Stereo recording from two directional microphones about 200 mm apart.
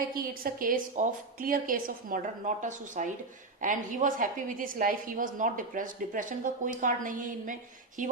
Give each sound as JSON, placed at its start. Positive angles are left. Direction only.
{"t": 0.1, "sound": "a woman's voice", "side_deg": -45}